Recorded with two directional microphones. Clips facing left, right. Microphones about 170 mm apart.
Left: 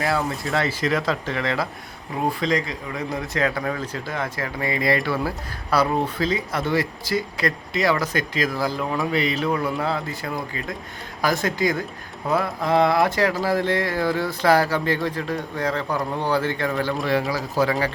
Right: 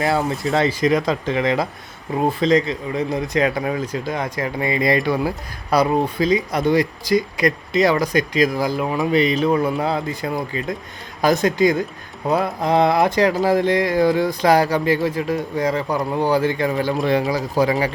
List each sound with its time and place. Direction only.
0.0 s a man's voice: 20° right (ahead or behind)